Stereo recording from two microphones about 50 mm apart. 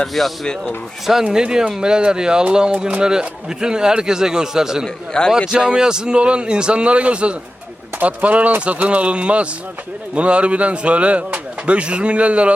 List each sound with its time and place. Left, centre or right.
0.1 s speech: centre
1.2 s speech: centre
5.2 s speech: centre
5.5 s speech: centre